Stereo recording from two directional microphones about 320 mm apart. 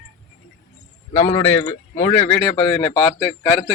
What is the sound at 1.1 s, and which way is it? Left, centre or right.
Speech, centre.